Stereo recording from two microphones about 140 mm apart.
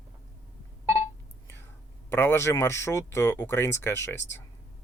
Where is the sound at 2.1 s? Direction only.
15° left (ahead or behind).